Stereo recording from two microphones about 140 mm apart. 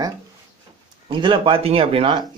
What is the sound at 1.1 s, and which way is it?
Speech, 40° right (ahead or behind).